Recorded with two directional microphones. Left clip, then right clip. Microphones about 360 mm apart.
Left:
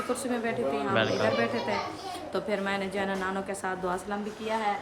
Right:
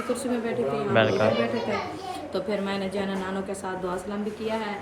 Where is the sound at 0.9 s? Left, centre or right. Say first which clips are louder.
Right 6 dB; centre.